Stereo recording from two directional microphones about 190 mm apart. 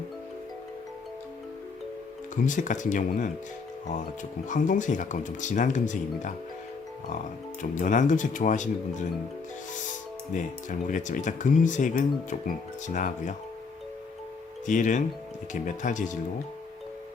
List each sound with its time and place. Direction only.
2.3 s speech: 40° left (ahead or behind)
4.4 s speech: 40° left (ahead or behind)
7.6 s speech: 40° left (ahead or behind)
10.3 s speech: 40° left (ahead or behind)
14.7 s speech: 40° left (ahead or behind)